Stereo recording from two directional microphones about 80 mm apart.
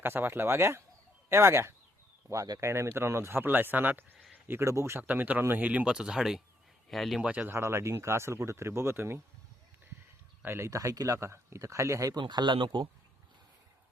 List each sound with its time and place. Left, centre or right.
0.0 s speech: right
5.0 s speech: right; by 7.2 s centre
7.2 s speech: centre
7.5 s speech: right
10.4 s speech: right
12.1 s speech: right